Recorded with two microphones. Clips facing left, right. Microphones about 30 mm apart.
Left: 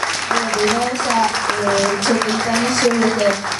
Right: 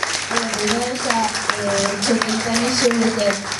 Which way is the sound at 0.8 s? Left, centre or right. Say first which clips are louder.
Left 3 dB; centre.